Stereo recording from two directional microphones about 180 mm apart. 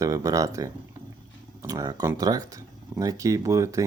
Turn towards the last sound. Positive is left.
turn(degrees=-15)  # may be behind; listen again after turning